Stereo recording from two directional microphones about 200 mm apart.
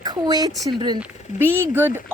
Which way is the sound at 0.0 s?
20° right (ahead or behind).